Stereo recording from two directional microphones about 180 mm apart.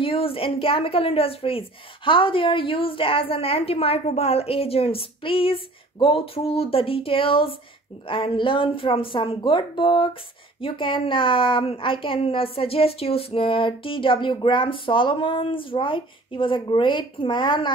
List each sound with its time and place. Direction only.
0.0 s a woman's voice: 30° left (ahead or behind)